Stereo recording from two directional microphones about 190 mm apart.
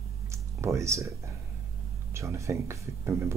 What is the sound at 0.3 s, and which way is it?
Speech, 15° right (ahead or behind).